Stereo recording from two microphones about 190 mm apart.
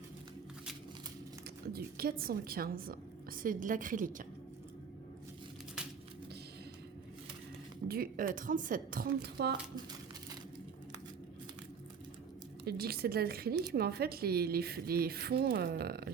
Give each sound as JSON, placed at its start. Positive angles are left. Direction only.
{"t": 1.6, "sound": "a woman's voice", "side_deg": -55}
{"t": 7.9, "sound": "a woman's voice", "side_deg": -50}
{"t": 12.6, "sound": "a woman's voice", "side_deg": -55}